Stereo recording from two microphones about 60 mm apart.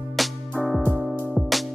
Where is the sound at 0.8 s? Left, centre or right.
Right.